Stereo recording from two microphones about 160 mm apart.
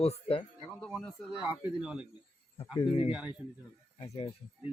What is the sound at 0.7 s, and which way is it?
Speech, 5° left (ahead or behind).